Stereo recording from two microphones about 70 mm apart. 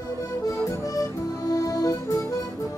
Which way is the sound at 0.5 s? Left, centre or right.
Left.